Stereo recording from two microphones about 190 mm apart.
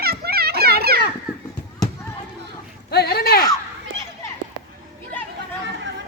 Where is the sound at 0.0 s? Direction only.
55° right (ahead or behind).